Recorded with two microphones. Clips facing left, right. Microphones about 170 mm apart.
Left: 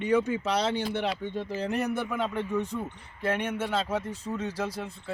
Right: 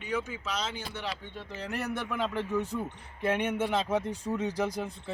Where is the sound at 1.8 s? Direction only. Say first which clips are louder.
Left 3 dB; 5° left (ahead or behind).